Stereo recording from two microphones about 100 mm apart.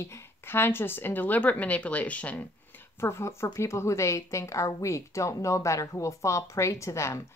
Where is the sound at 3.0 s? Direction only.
30° left (ahead or behind).